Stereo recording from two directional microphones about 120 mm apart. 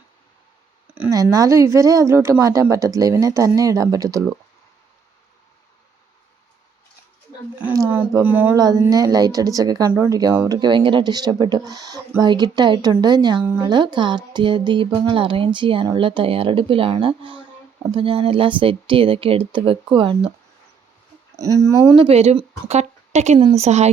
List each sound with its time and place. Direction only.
1.1 s speech: 30° right (ahead or behind)
8.2 s speech: 15° right (ahead or behind)
8.5 s speech: 30° right (ahead or behind)
10.6 s speech: 40° right (ahead or behind)
21.3 s speech: 25° right (ahead or behind)
21.9 s speech: 45° right (ahead or behind)
22.7 s speech: 65° right (ahead or behind)